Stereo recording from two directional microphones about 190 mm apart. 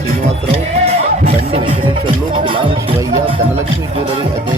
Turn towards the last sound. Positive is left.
turn(degrees=-25)  # may be behind; listen again after turning